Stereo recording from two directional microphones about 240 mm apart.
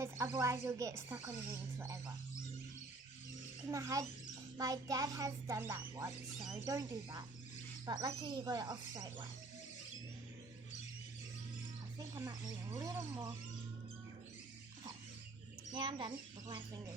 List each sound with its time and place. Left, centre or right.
0.0 s speech: centre
3.7 s speech: centre
12.1 s speech: centre
15.7 s speech: centre